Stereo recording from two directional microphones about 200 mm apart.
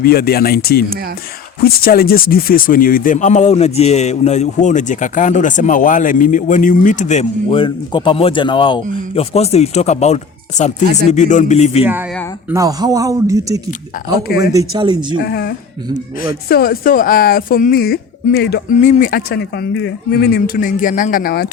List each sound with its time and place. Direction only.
0.0 s speech: 50° left (ahead or behind); by 11.9 s 30° left (ahead or behind)
12.5 s speech: 15° right (ahead or behind)
15.2 s speech: 50° left (ahead or behind)
18.8 s speech: 40° left (ahead or behind)